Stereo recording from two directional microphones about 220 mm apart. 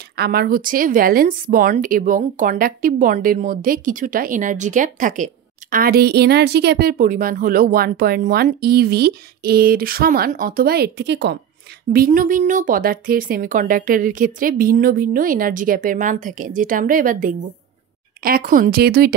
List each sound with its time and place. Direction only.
0.1 s speech: 45° right (ahead or behind)
11.9 s speech: 40° right (ahead or behind)